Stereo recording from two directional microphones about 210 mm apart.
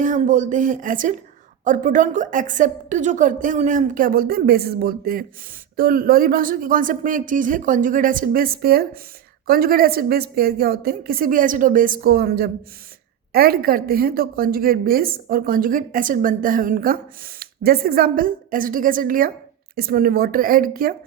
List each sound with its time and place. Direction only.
0.0 s a woman's voice: 35° right (ahead or behind)